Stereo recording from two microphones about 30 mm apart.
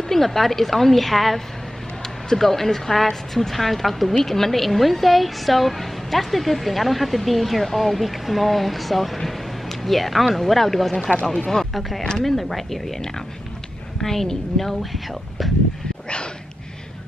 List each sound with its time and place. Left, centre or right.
0.1 s a woman's voice: centre
2.4 s a woman's voice: centre
12.0 s speech: left
12.3 s a woman's voice: centre
14.0 s a woman's voice: centre